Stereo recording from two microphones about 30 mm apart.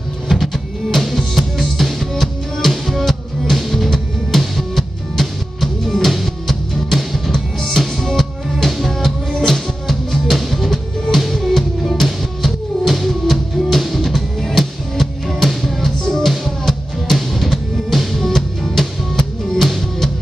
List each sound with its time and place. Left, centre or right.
0.3 s music: centre
9.3 s music: centre